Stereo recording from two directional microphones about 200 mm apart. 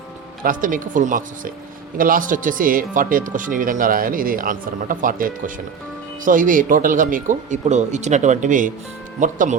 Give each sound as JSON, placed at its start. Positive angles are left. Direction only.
{"t": 0.4, "sound": "speech", "side_deg": -40}